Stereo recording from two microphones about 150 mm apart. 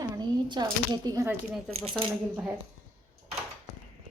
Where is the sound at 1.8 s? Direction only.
35° right (ahead or behind).